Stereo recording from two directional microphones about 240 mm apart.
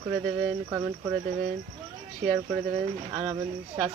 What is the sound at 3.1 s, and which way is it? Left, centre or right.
Speech, centre.